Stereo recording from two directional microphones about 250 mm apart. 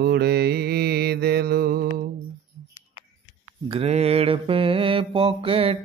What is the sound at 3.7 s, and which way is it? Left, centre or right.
Mantra, right.